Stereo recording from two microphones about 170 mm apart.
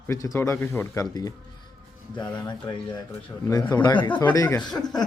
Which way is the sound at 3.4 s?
25° left (ahead or behind).